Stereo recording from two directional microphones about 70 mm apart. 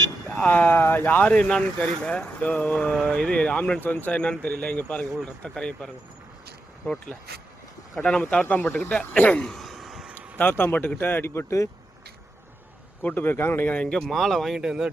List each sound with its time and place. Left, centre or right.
0.4 s speech: left
5.2 s speech: centre
7.9 s speech: centre
8.5 s speech: left
9.0 s speech: left
9.4 s a sound: centre
10.3 s speech: left
13.0 s speech: left
13.7 s speech: centre